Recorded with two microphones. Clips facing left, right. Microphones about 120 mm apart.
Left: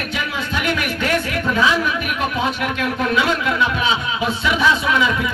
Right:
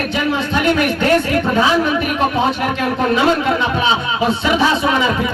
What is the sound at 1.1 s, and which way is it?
Speech, 50° right (ahead or behind).